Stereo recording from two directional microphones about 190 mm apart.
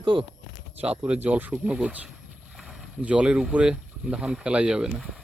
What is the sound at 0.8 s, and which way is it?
A man's voice, 5° right (ahead or behind).